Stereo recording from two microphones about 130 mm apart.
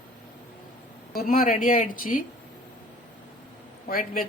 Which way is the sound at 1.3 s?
90° left.